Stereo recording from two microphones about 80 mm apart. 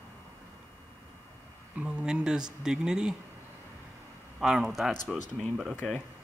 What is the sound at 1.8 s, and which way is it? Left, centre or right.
Speech, centre.